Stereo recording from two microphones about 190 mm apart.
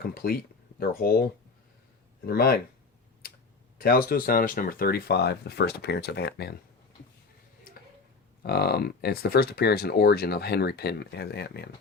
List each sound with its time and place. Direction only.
0.0 s speech: 50° left (ahead or behind)
3.8 s speech: 50° left (ahead or behind)
8.4 s speech: 55° left (ahead or behind)